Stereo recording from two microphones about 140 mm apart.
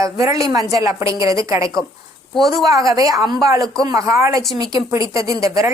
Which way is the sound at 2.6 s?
25° right (ahead or behind).